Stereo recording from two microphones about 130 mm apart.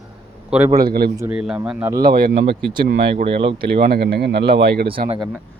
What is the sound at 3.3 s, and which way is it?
Speech, 45° right (ahead or behind).